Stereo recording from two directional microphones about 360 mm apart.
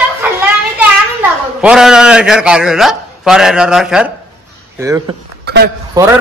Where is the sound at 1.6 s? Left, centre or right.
Centre.